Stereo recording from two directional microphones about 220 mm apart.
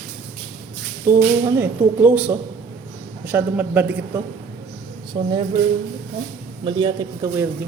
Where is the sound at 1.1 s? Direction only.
10° right (ahead or behind).